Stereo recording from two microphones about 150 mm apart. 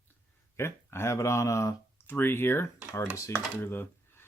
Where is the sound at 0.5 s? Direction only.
15° left (ahead or behind).